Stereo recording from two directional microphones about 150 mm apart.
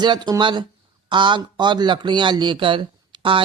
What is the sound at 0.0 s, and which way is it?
Speech, 30° right (ahead or behind).